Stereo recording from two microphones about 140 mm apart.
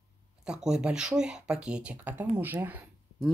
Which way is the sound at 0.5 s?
5° right (ahead or behind).